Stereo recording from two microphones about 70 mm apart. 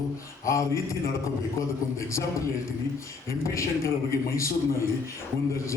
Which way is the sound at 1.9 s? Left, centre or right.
Left.